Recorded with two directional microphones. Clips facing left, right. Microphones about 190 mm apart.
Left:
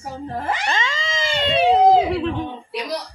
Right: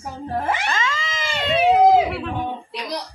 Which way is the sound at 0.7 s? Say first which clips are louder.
Left 1 dB; 25° left (ahead or behind).